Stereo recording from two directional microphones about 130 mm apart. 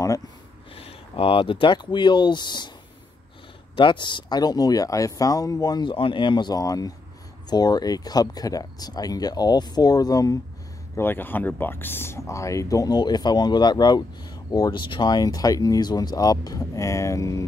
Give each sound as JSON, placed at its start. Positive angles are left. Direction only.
{"t": 0.7, "sound": "speech", "side_deg": 50}
{"t": 3.7, "sound": "speech", "side_deg": 35}
{"t": 11.0, "sound": "speech", "side_deg": 15}